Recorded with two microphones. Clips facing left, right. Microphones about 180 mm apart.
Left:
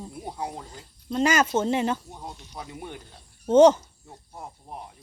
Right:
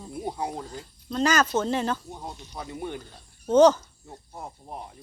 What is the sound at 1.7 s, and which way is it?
Speech, 10° left (ahead or behind).